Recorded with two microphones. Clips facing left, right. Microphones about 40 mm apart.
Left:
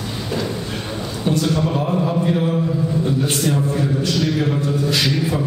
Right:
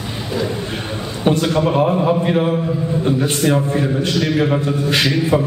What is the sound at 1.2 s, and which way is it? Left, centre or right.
A man's voice, right.